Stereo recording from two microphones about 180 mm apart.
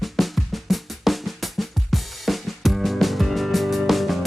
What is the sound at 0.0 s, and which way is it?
Drum, centre (ahead or behind).